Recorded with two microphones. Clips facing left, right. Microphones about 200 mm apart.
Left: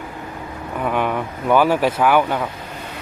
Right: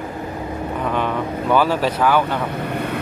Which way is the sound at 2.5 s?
65° right (ahead or behind).